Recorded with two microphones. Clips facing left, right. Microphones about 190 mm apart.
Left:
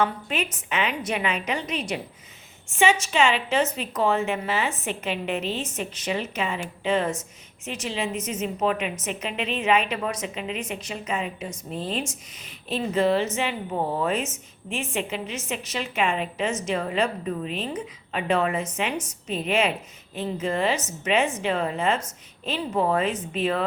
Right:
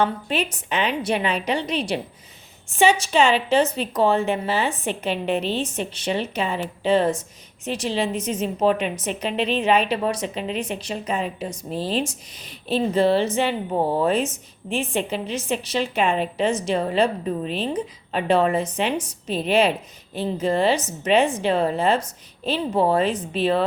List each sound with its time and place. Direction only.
0.0 s a woman's voice: 35° right (ahead or behind)